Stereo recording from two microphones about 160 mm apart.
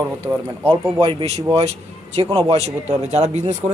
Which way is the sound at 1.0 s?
35° right (ahead or behind).